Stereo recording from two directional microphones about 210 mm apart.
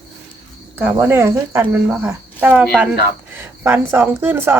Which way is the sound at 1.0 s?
10° right (ahead or behind).